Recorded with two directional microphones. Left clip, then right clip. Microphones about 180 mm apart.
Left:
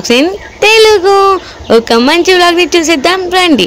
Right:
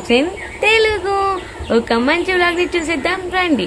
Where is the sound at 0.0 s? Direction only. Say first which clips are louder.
Left 7 dB; 50° left (ahead or behind).